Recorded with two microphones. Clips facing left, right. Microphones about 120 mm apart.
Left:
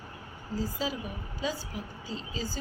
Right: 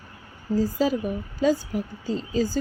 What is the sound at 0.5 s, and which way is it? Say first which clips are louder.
Speech: right 10 dB; 45° right (ahead or behind).